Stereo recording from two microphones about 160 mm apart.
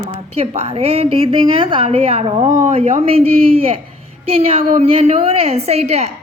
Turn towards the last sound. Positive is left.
turn(degrees=-40)  # may be behind; listen again after turning